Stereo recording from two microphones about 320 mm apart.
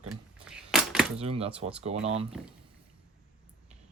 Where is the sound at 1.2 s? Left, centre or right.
Centre.